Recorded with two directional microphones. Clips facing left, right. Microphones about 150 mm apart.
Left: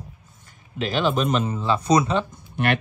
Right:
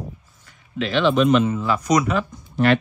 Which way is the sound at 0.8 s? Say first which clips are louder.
Right 4 dB; 40° left (ahead or behind).